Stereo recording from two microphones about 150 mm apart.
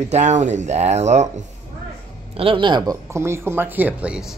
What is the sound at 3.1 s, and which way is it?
Speech, 15° right (ahead or behind).